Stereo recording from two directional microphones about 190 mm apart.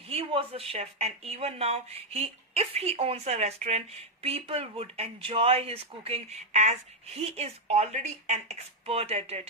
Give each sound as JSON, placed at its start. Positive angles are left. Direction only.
{"t": 0.1, "sound": "speech", "side_deg": -30}